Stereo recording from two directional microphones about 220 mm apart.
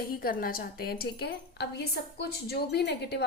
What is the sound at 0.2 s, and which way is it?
A woman's voice, 40° left (ahead or behind).